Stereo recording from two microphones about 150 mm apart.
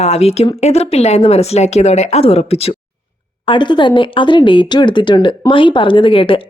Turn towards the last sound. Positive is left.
turn(degrees=35)  # may be behind; listen again after turning